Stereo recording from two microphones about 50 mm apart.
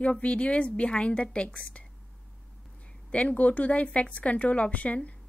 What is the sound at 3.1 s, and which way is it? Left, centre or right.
A woman's voice, left.